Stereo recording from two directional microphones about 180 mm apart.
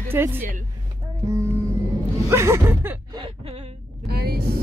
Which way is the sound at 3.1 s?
30° right (ahead or behind).